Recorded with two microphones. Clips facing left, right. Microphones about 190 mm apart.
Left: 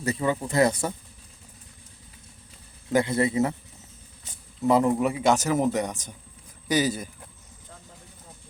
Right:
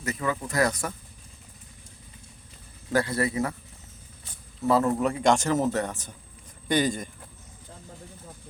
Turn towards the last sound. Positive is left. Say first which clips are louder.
# even
turn(degrees=5)  # may be behind; listen again after turning